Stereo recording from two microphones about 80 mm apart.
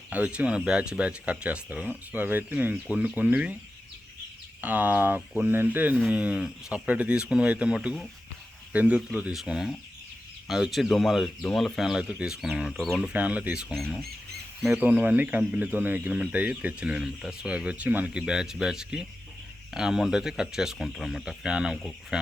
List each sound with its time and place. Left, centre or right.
0.1 s speech: centre
4.6 s speech: right
9.3 s speech: centre
13.1 s speech: centre
13.7 s speech: centre
14.7 s speech: centre